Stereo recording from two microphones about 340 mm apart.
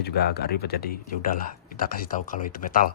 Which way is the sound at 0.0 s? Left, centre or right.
Left.